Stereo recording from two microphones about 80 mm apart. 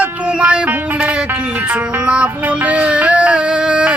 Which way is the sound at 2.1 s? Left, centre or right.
Centre.